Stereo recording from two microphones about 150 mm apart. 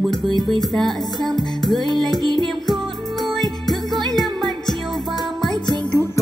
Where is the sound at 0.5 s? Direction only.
Centre (ahead or behind).